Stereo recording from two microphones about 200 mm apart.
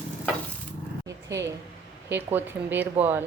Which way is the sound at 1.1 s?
15° right (ahead or behind).